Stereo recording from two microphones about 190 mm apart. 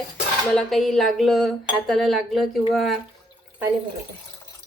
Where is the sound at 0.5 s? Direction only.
Centre (ahead or behind).